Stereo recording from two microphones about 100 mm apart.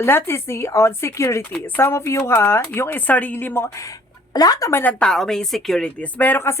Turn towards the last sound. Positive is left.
turn(degrees=25)  # may be behind; listen again after turning